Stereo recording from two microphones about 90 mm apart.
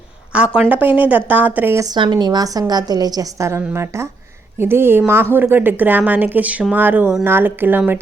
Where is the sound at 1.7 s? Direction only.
40° right (ahead or behind).